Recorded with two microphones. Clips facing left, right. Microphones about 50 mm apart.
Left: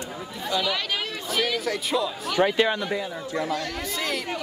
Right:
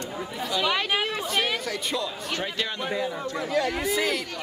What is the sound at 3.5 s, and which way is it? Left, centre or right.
Speech, centre.